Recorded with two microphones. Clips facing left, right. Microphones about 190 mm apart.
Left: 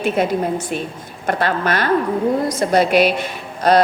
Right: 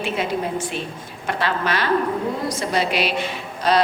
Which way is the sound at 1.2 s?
50° left (ahead or behind).